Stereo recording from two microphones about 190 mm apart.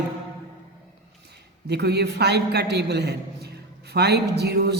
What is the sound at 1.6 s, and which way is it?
A man's voice, 60° right (ahead or behind).